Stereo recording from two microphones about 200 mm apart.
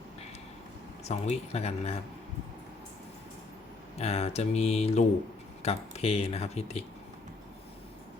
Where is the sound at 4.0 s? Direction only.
30° left (ahead or behind).